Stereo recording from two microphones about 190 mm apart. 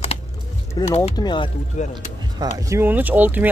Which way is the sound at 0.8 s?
20° left (ahead or behind).